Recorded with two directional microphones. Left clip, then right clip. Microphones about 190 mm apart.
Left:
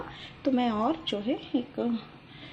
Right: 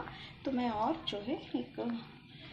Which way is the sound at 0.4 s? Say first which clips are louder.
Left 7 dB; 50° left (ahead or behind).